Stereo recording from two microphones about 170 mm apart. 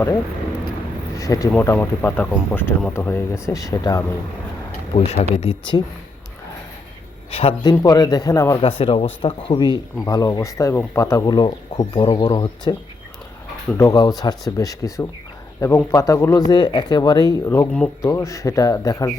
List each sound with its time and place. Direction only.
1.1 s speech: 20° left (ahead or behind)
4.9 s speech: 35° left (ahead or behind)
7.3 s a man's voice: 35° left (ahead or behind)
7.7 s speech: 20° left (ahead or behind)
8.6 s speech: 30° left (ahead or behind)
13.7 s speech: 20° left (ahead or behind)